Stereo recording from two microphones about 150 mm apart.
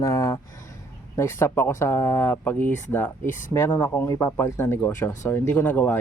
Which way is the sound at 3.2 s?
60° left (ahead or behind).